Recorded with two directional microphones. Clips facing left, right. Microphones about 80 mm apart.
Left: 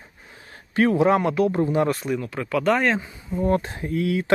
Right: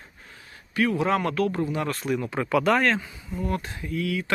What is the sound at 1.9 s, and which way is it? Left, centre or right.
Speech, centre.